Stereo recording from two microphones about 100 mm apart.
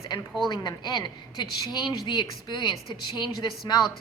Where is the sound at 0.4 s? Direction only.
45° left (ahead or behind).